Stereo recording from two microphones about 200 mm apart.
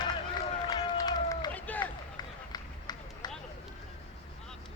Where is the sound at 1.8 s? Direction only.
20° left (ahead or behind).